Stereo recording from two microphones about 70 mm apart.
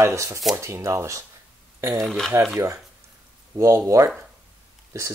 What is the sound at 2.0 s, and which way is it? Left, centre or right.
Speech, centre.